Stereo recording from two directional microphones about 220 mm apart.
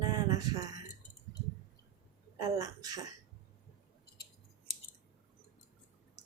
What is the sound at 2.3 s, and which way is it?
Speech, 15° right (ahead or behind).